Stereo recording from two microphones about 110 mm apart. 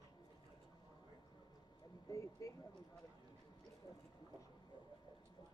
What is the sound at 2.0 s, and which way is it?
Speech, 30° left (ahead or behind).